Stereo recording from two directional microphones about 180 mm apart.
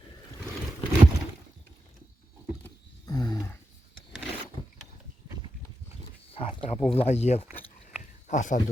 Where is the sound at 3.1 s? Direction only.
20° left (ahead or behind).